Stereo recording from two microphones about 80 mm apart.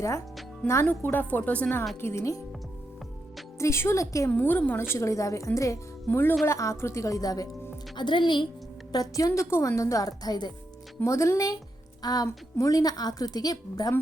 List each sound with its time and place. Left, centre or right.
0.9 s a woman's voice: left
2.0 s a woman's voice: left
3.6 s a woman's voice: left
4.3 s a woman's voice: left
6.1 s a woman's voice: left
6.4 s a woman's voice: left
7.9 s a woman's voice: left
8.9 s a woman's voice: left
11.0 s a woman's voice: left